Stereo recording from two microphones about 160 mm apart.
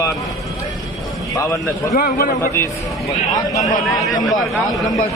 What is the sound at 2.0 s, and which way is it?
Speech, 65° left (ahead or behind).